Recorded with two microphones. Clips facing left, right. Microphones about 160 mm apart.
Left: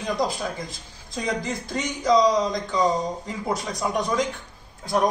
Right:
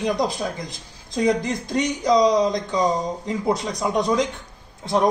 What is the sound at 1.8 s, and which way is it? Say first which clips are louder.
A man's voice: right 2 dB; 20° right (ahead or behind).